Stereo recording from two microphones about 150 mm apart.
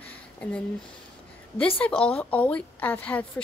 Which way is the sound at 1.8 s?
5° left (ahead or behind).